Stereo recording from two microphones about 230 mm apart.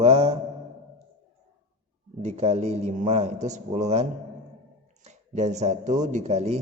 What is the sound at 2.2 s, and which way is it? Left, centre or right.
A man's voice, right.